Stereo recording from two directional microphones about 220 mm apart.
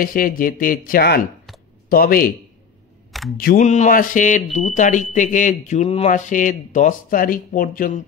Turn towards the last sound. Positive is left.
turn(degrees=40)  # may be behind; listen again after turning